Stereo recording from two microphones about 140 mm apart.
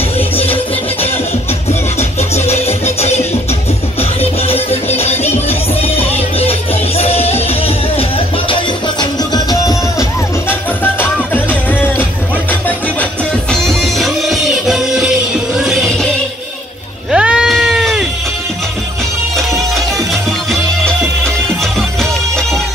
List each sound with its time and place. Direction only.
1.7 s music: 50° left (ahead or behind)
4.2 s music: 45° left (ahead or behind)
9.0 s music: 30° left (ahead or behind)
10.8 s music: 15° left (ahead or behind)
13.5 s music: centre (ahead or behind)
17.1 s sheep: 5° right (ahead or behind)
19.3 s music: centre (ahead or behind)